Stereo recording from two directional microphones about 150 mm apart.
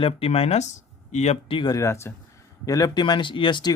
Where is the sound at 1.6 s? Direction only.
25° left (ahead or behind).